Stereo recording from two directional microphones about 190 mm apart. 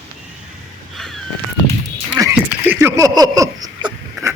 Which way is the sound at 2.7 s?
10° right (ahead or behind).